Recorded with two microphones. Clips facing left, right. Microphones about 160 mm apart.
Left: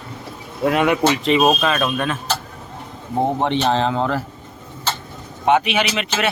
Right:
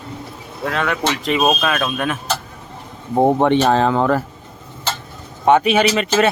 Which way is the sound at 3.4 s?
50° right (ahead or behind).